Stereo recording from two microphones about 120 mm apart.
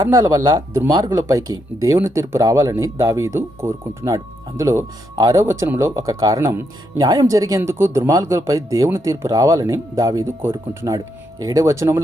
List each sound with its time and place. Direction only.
0.3 s speech: 25° right (ahead or behind)
0.9 s speech: 35° right (ahead or behind); by 10.9 s 20° right (ahead or behind)
10.9 s speech: 30° right (ahead or behind)